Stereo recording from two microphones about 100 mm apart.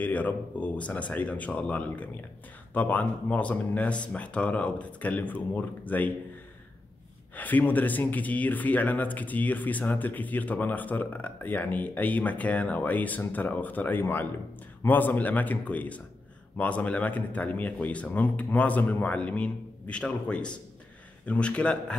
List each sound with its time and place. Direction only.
0.0 s speech: 15° left (ahead or behind)
7.3 s speech: 15° left (ahead or behind)